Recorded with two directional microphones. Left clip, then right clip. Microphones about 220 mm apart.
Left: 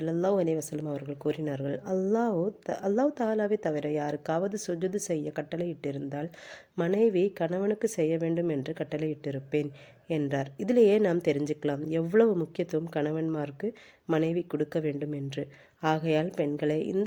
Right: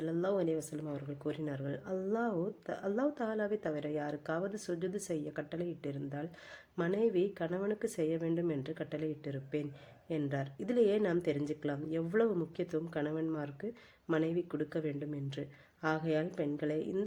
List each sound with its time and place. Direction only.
0.0 s a woman's voice: 30° left (ahead or behind)